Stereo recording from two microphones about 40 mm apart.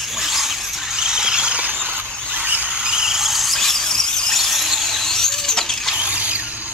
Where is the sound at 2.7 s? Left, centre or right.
Centre.